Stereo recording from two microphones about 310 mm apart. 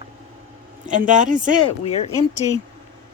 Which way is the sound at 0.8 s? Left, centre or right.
Right.